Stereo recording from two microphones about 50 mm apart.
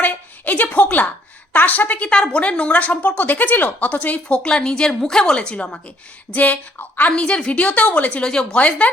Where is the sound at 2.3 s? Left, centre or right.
Left.